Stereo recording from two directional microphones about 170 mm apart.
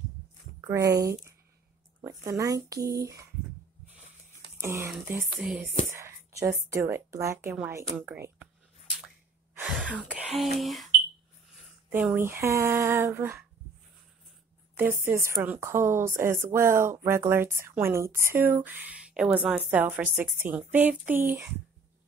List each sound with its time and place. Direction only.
0.6 s speech: 20° right (ahead or behind)
4.6 s a woman's voice: 15° right (ahead or behind)
9.6 s gasp: 5° right (ahead or behind)
10.1 s speech: 5° right (ahead or behind)
11.9 s a woman's voice: 10° right (ahead or behind)
14.8 s a woman's voice: 15° right (ahead or behind)